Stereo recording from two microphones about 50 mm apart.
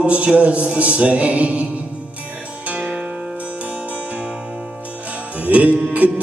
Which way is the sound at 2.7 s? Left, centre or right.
Right.